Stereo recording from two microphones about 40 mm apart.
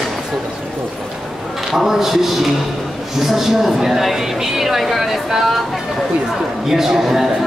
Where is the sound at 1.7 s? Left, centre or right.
Centre.